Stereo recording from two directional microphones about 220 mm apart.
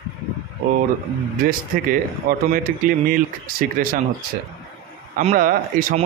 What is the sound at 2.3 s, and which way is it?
Speech, 40° right (ahead or behind).